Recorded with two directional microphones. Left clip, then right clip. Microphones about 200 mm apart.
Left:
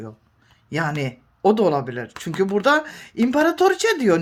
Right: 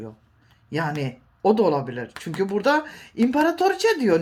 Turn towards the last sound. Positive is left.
turn(degrees=35)  # may be behind; listen again after turning